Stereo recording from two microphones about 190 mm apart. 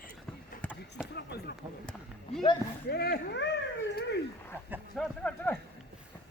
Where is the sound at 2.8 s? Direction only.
55° left (ahead or behind).